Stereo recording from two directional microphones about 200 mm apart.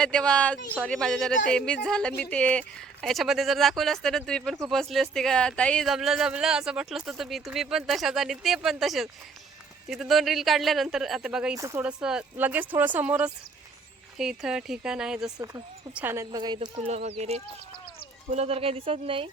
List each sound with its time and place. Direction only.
0.0 s speech: 5° left (ahead or behind)
11.5 s speech: 15° right (ahead or behind)